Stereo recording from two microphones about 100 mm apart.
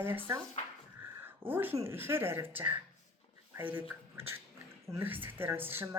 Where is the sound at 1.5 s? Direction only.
25° right (ahead or behind).